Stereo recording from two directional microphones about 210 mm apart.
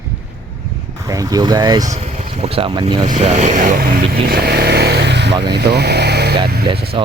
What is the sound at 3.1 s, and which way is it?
Speech, 30° right (ahead or behind).